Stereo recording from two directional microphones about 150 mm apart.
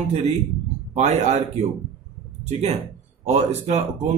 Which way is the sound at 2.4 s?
45° right (ahead or behind).